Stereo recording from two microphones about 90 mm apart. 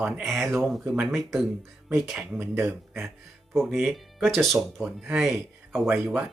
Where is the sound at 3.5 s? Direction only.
5° left (ahead or behind).